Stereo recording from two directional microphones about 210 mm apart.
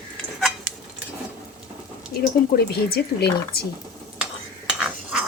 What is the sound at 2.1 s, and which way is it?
Speech, 45° left (ahead or behind).